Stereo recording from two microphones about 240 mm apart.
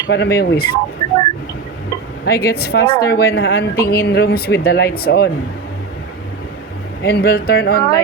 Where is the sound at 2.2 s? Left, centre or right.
Left.